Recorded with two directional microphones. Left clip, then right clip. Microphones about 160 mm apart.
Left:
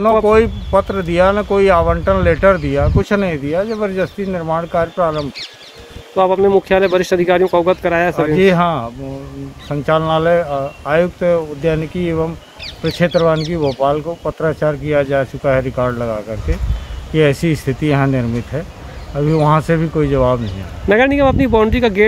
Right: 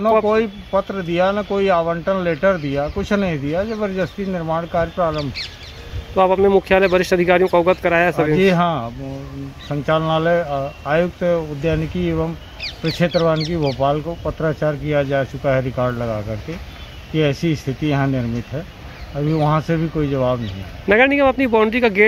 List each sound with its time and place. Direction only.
0.0 s speech: 10° left (ahead or behind)
5.2 s speech: 60° left (ahead or behind)
6.1 s speech: 5° left (ahead or behind)
12.6 s bird: 50° left (ahead or behind)
13.0 s speech: 10° left (ahead or behind)